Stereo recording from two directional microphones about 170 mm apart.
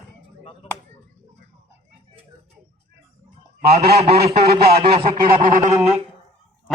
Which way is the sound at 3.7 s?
35° right (ahead or behind).